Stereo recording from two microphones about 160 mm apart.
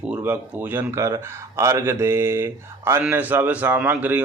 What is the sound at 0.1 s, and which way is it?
A man's voice, 10° right (ahead or behind).